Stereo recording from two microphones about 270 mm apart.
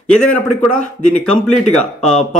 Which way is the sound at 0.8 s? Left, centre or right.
Left.